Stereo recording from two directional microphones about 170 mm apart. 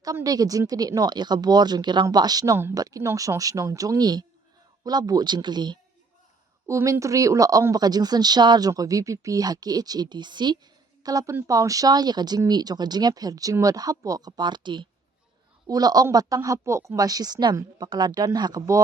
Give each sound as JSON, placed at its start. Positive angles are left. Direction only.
{"t": 0.0, "sound": "speech", "side_deg": -20}